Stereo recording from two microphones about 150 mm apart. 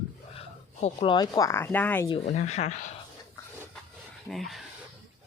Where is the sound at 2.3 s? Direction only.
45° left (ahead or behind).